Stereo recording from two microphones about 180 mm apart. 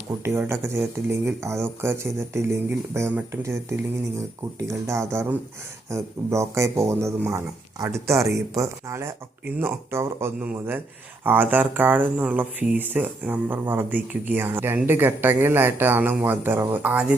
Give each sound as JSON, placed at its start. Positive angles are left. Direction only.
{"t": 0.3, "sound": "speech", "side_deg": -15}